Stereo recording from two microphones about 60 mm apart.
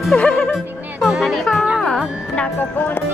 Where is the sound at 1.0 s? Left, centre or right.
Centre.